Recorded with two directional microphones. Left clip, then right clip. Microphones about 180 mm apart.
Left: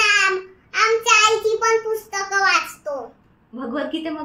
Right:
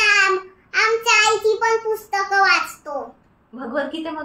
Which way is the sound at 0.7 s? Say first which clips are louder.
Even; 20° right (ahead or behind).